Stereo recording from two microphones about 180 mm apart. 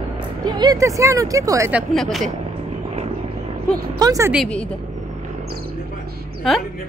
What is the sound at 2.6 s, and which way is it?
Vehicle, 35° right (ahead or behind).